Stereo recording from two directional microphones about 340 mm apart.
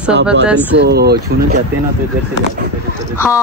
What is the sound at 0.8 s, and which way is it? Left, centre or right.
Speech, right.